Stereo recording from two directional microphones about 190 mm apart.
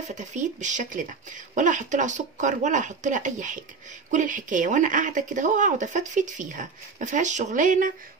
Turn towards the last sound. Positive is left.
turn(degrees=-45)  # may be behind; listen again after turning